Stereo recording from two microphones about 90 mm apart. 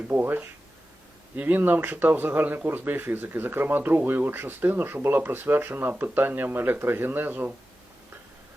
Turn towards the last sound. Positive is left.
turn(degrees=-20)  # may be behind; listen again after turning